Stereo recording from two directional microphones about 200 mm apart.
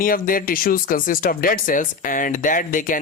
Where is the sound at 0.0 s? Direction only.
45° left (ahead or behind).